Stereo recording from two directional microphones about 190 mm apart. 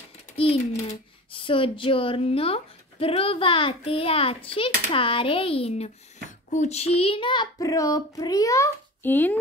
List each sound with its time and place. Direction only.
1.3 s speech: 25° left (ahead or behind); by 9.4 s 10° left (ahead or behind)